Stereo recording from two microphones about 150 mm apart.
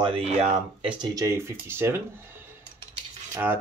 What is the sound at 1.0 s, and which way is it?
Speech, 20° right (ahead or behind).